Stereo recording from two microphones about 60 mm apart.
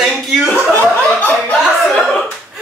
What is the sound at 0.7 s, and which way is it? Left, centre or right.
Chuckle, left.